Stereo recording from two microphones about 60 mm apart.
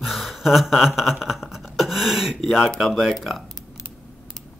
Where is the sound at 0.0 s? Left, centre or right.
Centre.